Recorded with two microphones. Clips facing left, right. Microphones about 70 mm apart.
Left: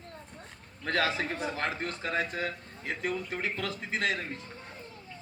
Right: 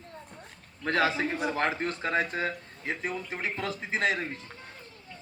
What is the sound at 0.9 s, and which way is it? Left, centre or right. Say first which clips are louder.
A man's voice: right 3 dB; right.